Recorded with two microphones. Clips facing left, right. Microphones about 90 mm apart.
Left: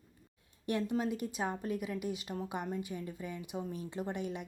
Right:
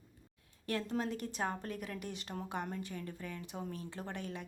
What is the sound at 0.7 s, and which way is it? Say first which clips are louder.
A woman's voice: left 3 dB; 20° left (ahead or behind).